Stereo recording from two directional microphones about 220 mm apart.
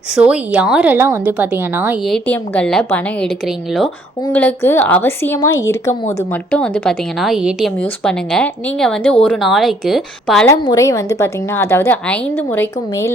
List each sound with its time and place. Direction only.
0.1 s a woman's voice: 5° right (ahead or behind)
10.4 s a woman's voice: 15° left (ahead or behind)